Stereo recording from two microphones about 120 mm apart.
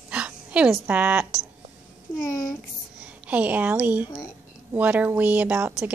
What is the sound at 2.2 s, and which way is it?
Speech, 25° left (ahead or behind).